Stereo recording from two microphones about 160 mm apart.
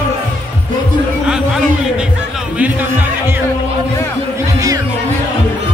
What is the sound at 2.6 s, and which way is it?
Music, 10° right (ahead or behind).